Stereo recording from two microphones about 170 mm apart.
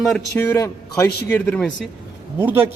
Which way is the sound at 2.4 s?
15° right (ahead or behind).